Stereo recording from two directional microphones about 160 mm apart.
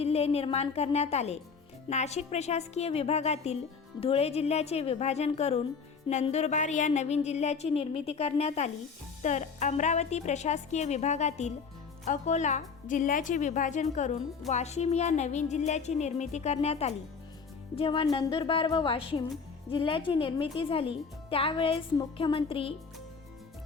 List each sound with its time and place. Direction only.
0.0 s a woman's voice: 40° left (ahead or behind)